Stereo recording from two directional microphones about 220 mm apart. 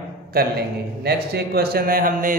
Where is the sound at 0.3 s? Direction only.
45° right (ahead or behind).